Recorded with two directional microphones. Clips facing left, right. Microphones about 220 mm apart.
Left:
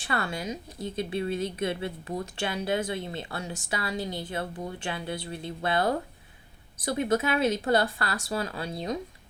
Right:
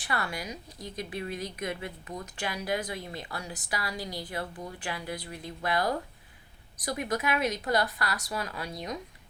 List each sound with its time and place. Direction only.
0.0 s a woman's voice: 25° left (ahead or behind)